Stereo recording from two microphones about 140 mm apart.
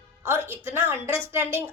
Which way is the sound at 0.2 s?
15° right (ahead or behind).